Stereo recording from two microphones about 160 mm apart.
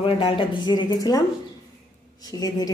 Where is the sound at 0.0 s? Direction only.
35° left (ahead or behind).